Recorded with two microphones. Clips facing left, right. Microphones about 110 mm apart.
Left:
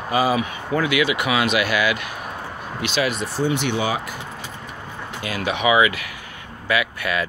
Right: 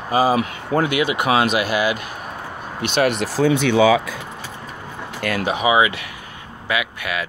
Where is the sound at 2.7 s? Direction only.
55° right (ahead or behind); by 3.5 s 90° right.